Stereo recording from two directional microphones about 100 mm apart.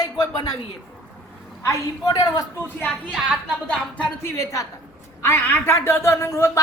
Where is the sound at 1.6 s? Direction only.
40° left (ahead or behind).